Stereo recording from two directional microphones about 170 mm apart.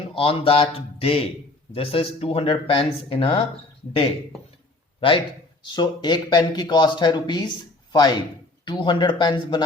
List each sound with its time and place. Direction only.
0.1 s speech: 30° left (ahead or behind)
4.9 s a man's voice: 30° left (ahead or behind)